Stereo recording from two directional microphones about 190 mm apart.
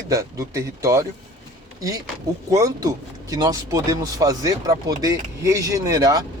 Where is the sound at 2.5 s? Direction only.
20° right (ahead or behind).